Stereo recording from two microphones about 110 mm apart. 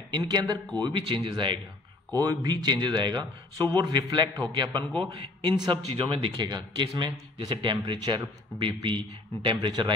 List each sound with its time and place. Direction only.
0.1 s speech: 40° right (ahead or behind)
2.1 s speech: 40° right (ahead or behind)